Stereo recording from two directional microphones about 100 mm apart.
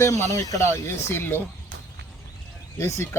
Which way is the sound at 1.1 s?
20° left (ahead or behind).